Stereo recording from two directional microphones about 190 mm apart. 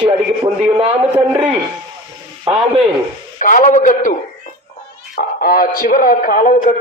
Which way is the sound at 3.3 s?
45° left (ahead or behind).